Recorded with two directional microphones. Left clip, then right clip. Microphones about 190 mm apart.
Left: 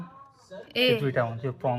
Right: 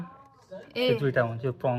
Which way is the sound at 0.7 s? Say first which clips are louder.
Left 2 dB; 5° left (ahead or behind).